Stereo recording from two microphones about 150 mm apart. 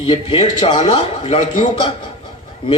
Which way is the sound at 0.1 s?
40° left (ahead or behind).